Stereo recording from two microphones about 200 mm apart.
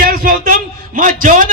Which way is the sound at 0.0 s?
45° right (ahead or behind).